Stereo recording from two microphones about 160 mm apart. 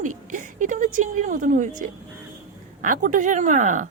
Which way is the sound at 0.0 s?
50° right (ahead or behind).